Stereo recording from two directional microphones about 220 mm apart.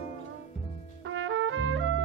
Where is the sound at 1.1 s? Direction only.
60° right (ahead or behind).